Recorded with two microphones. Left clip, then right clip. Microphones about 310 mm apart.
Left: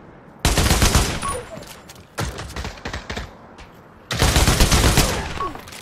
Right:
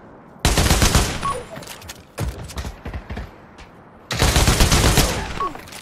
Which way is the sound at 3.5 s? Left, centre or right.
Centre.